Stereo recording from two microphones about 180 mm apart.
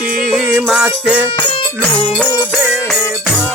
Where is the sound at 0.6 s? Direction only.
5° right (ahead or behind).